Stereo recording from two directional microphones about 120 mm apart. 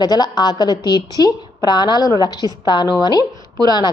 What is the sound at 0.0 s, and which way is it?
A woman's voice, 35° left (ahead or behind).